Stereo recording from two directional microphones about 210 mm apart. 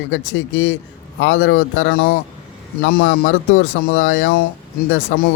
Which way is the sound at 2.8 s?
45° left (ahead or behind).